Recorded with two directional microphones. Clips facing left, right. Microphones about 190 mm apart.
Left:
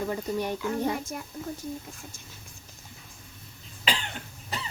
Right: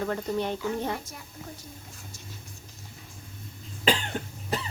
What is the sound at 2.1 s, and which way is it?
Speech, 50° left (ahead or behind).